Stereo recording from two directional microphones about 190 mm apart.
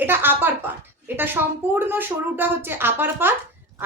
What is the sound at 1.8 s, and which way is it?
A woman's voice, 10° right (ahead or behind).